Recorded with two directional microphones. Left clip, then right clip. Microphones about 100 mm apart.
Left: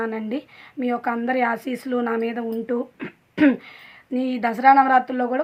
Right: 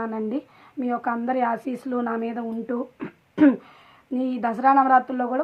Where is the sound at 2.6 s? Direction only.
25° left (ahead or behind).